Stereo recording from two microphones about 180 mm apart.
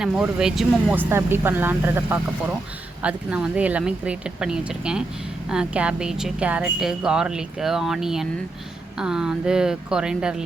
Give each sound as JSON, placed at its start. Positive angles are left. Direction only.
{"t": 0.0, "sound": "a woman's voice", "side_deg": -5}